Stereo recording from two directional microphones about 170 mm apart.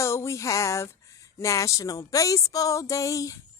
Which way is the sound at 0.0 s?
15° left (ahead or behind).